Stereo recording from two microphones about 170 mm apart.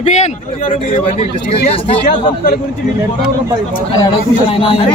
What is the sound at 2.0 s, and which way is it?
Speech, 50° left (ahead or behind).